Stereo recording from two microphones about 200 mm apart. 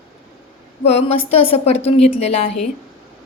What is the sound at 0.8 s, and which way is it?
A woman's voice, 30° left (ahead or behind).